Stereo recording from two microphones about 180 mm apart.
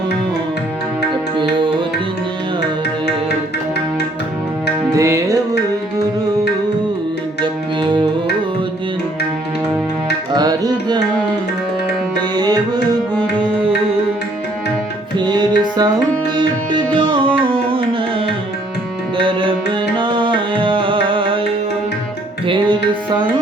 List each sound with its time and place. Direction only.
1.4 s music: 25° right (ahead or behind)
4.9 s tabla: 15° right (ahead or behind)
7.4 s music: 25° right (ahead or behind)
10.3 s music: 20° right (ahead or behind)
12.4 s tabla: 20° right (ahead or behind)
15.2 s tabla: 25° right (ahead or behind)
19.1 s music: 30° right (ahead or behind)
22.4 s music: 25° right (ahead or behind)